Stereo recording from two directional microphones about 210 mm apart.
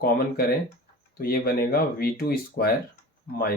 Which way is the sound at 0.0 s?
45° left (ahead or behind).